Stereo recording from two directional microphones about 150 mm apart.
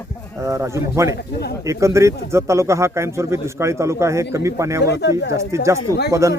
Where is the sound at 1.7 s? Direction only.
20° right (ahead or behind).